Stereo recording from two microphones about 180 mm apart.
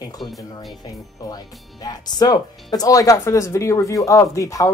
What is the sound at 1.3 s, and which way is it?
Speech, 20° left (ahead or behind).